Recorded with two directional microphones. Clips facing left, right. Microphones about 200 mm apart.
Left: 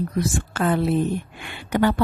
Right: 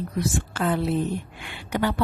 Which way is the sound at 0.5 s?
50° left (ahead or behind).